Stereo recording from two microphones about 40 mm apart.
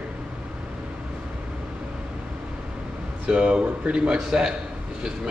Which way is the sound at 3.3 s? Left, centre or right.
Right.